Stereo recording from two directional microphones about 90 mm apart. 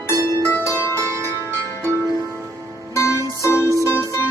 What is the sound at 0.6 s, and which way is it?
Zither, 30° left (ahead or behind).